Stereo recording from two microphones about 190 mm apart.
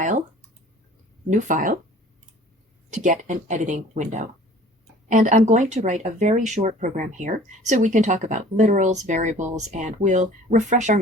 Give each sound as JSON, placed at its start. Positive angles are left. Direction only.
{"t": 1.3, "sound": "speech", "side_deg": -40}
{"t": 2.9, "sound": "speech", "side_deg": -40}